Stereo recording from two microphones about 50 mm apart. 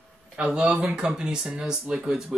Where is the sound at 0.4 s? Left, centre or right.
Centre.